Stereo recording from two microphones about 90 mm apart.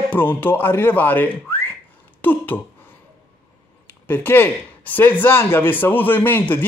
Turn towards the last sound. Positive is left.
turn(degrees=20)  # may be behind; listen again after turning